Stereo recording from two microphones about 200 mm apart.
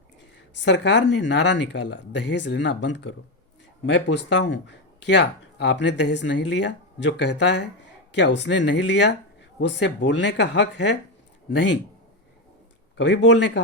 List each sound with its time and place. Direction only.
0.5 s speech: 65° left (ahead or behind)
13.0 s speech: 65° left (ahead or behind)